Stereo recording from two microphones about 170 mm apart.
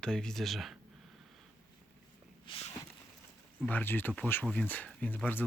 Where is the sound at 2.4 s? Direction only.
35° left (ahead or behind).